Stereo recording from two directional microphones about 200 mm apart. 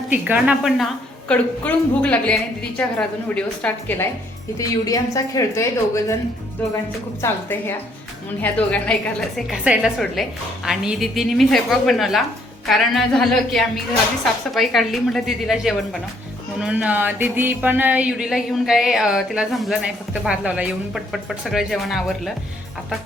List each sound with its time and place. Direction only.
0.1 s music: 5° right (ahead or behind)
1.3 s a woman's voice: 5° left (ahead or behind)
7.2 s a woman's voice: 10° left (ahead or behind)
8.4 s music: 5° left (ahead or behind)